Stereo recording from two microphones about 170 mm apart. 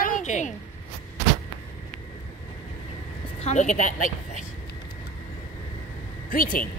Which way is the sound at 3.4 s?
45° left (ahead or behind).